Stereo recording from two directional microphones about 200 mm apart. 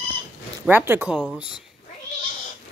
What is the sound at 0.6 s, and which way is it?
Speech, 10° right (ahead or behind).